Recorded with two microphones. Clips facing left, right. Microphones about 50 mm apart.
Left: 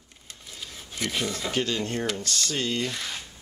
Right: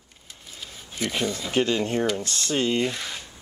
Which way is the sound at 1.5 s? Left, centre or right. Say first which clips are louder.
Right 6 dB; right.